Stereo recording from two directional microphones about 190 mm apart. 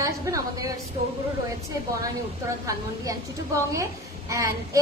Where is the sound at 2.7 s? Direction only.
15° right (ahead or behind).